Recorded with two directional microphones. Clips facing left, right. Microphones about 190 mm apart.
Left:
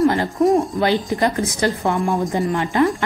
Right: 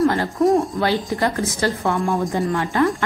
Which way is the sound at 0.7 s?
15° left (ahead or behind).